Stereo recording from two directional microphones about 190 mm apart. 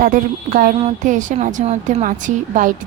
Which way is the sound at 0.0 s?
45° right (ahead or behind).